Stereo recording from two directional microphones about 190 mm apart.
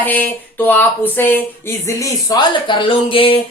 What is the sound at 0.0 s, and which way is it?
Speech, 10° left (ahead or behind).